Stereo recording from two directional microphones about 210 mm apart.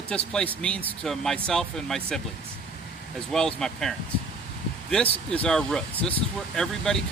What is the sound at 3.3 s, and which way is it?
Speech, centre (ahead or behind).